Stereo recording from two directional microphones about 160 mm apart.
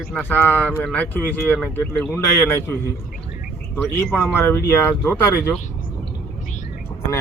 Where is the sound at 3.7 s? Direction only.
10° left (ahead or behind).